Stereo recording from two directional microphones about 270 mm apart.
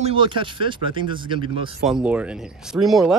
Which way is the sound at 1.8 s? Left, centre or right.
Centre.